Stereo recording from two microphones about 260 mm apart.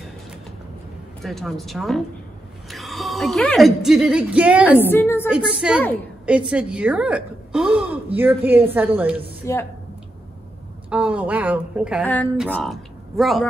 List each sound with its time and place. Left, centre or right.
1.2 s a woman's voice: centre
4.9 s a woman's voice: centre
5.5 s a woman's voice: centre
9.4 s a woman's voice: centre
10.9 s a woman's voice: centre